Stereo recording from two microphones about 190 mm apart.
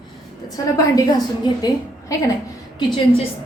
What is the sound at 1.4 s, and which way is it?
Speech, 25° left (ahead or behind).